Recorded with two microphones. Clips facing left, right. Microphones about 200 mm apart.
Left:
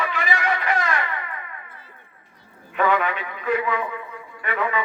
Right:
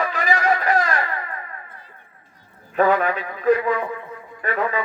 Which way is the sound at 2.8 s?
35° right (ahead or behind).